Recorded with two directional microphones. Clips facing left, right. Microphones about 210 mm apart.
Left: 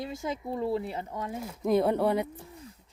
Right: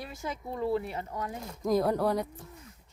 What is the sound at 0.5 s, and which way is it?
Speech, 25° left (ahead or behind).